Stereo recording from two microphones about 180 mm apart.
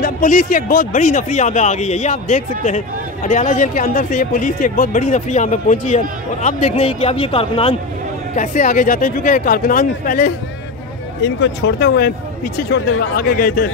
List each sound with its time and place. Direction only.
0.0 s speech: 45° left (ahead or behind); by 7.7 s 30° left (ahead or behind)
8.4 s speech: 45° left (ahead or behind)
11.2 s speech: 75° left (ahead or behind)
13.2 s speech: 55° left (ahead or behind)